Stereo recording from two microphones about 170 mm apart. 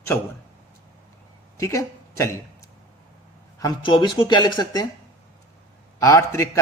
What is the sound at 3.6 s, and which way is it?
Speech, 25° left (ahead or behind).